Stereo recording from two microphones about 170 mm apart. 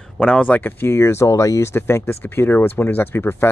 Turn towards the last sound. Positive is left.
turn(degrees=15)  # may be behind; listen again after turning